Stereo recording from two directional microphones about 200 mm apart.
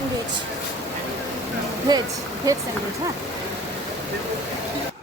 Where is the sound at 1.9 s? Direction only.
20° right (ahead or behind).